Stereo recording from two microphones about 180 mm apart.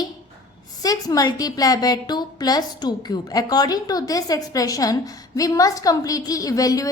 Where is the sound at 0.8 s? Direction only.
20° left (ahead or behind).